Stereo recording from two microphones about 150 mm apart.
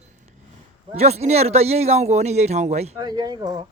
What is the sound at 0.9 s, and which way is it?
Speech, 45° right (ahead or behind).